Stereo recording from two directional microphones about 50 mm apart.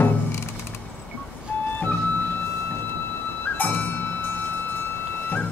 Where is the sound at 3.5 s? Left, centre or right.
Left.